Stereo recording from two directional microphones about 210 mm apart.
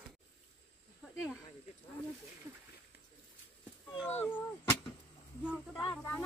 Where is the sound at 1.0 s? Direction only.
Centre (ahead or behind).